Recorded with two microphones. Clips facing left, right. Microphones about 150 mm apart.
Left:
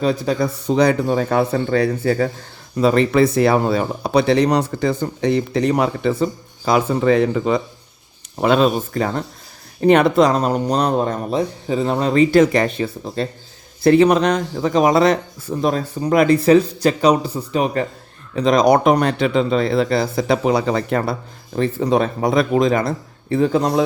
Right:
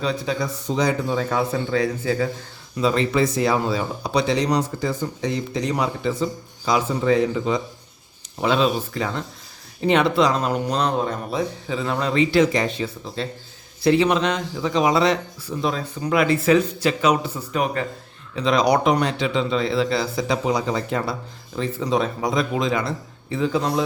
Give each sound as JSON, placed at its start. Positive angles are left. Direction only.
{"t": 0.0, "sound": "speech", "side_deg": 50}
{"t": 18.3, "sound": "speech", "side_deg": 45}